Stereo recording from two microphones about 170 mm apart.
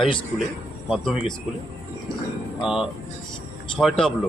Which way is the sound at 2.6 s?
5° right (ahead or behind).